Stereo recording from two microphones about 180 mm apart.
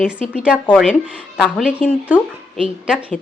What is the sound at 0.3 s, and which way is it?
Speech, 5° right (ahead or behind).